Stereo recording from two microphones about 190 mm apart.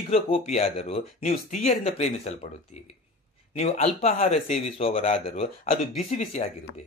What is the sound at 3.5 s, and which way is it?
Speech, 35° left (ahead or behind).